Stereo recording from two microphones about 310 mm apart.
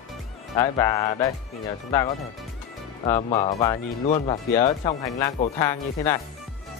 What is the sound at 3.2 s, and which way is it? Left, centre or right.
Speech, centre.